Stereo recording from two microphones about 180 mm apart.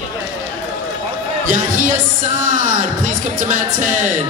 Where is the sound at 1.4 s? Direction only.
45° right (ahead or behind).